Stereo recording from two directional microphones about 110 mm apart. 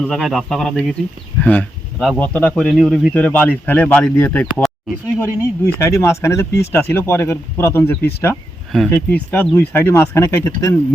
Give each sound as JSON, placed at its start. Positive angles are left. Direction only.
{"t": 0.1, "sound": "a man's voice", "side_deg": 0}
{"t": 1.4, "sound": "a man's voice", "side_deg": 15}
{"t": 2.6, "sound": "a man's voice", "side_deg": 0}